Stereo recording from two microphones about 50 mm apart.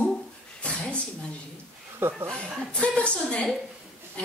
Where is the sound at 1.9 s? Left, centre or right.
Right.